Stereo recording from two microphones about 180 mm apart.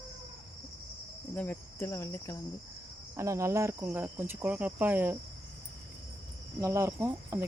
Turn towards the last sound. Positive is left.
turn(degrees=-15)  # may be behind; listen again after turning